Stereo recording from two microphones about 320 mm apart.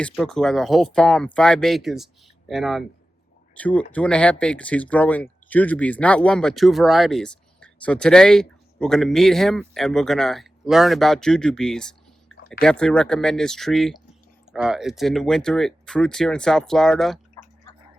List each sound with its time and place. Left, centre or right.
0.0 s speech: centre